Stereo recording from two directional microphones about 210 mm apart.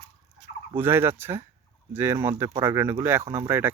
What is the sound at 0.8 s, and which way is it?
Speech, 10° right (ahead or behind).